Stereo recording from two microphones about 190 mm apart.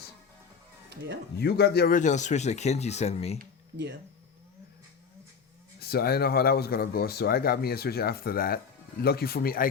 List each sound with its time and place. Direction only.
0.9 s music: 65° right (ahead or behind)
1.4 s speech: 55° left (ahead or behind); by 3.3 s 35° left (ahead or behind)
5.8 s speech: 55° left (ahead or behind)